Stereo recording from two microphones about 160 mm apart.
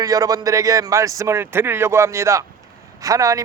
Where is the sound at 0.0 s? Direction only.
20° right (ahead or behind).